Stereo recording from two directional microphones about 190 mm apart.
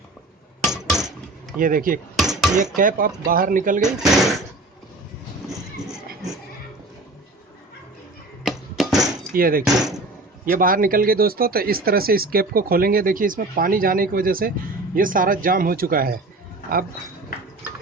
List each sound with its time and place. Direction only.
0.6 s hammer: centre (ahead or behind)
1.5 s speech: 45° right (ahead or behind)
2.1 s a sound: centre (ahead or behind)
2.7 s speech: 45° right (ahead or behind)
4.0 s speech: centre (ahead or behind)
5.5 s a sound: centre (ahead or behind)
8.4 s music: centre (ahead or behind)
9.3 s speech: 50° right (ahead or behind)